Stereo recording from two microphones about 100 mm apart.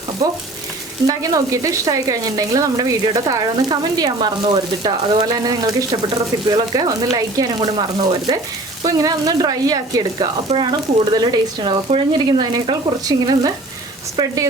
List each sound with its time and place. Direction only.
1.0 s speech: 35° right (ahead or behind)
5.3 s speech: 40° right (ahead or behind)